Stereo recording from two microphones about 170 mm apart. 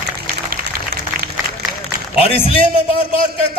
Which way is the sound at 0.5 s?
60° right (ahead or behind).